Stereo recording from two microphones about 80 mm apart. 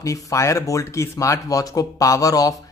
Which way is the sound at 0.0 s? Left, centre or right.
Left.